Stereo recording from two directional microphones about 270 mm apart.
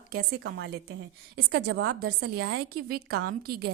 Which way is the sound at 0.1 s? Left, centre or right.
Right.